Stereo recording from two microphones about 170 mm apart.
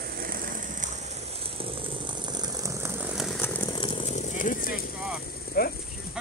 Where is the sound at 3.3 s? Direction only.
10° left (ahead or behind).